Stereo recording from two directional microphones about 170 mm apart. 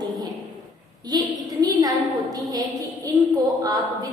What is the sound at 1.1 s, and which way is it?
A woman's voice, 25° right (ahead or behind).